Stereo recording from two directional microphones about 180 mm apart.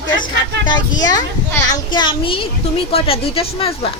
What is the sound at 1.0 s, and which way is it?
A child's voice, 20° left (ahead or behind).